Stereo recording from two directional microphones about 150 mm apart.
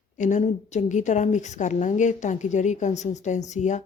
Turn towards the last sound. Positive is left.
turn(degrees=55)  # may be behind; listen again after turning